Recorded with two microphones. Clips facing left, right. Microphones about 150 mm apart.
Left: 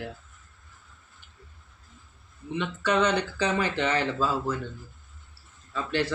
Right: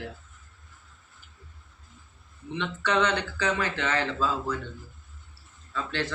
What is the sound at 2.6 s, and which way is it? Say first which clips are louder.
Speech: left 1 dB; 10° left (ahead or behind).